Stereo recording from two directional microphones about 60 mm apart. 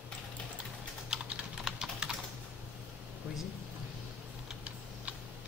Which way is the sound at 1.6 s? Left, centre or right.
Centre.